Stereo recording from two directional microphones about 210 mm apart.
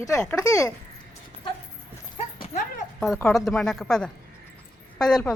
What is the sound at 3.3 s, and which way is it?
A woman's voice, centre (ahead or behind).